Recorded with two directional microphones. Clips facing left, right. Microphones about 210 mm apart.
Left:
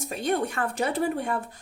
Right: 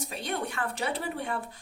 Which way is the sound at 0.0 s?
45° left (ahead or behind).